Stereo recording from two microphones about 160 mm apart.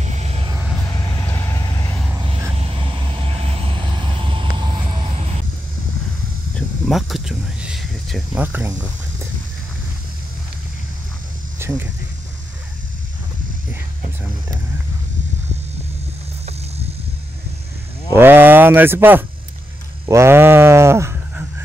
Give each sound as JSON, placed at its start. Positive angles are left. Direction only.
{"t": 0.0, "sound": "music", "side_deg": -45}
{"t": 0.9, "sound": "vehicle", "side_deg": 20}
{"t": 2.1, "sound": "vehicle", "side_deg": -35}
{"t": 6.5, "sound": "a sound", "side_deg": 0}
{"t": 8.5, "sound": "speech", "side_deg": -15}
{"t": 11.6, "sound": "speech", "side_deg": -15}
{"t": 18.1, "sound": "speech", "side_deg": -15}